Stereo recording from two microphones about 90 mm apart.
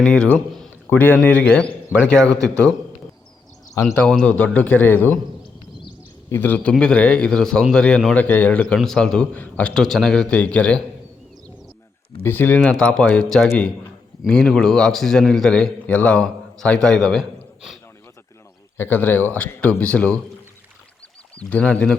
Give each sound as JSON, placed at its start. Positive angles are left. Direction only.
{"t": 0.0, "sound": "a man's voice", "side_deg": 10}
{"t": 0.9, "sound": "a man's voice", "side_deg": 20}
{"t": 4.0, "sound": "a man's voice", "side_deg": 10}
{"t": 6.2, "sound": "a man's voice", "side_deg": 25}
{"t": 6.6, "sound": "a man's voice", "side_deg": 10}
{"t": 12.2, "sound": "a man's voice", "side_deg": 20}
{"t": 18.8, "sound": "speech", "side_deg": 20}
{"t": 21.3, "sound": "a man's voice", "side_deg": 15}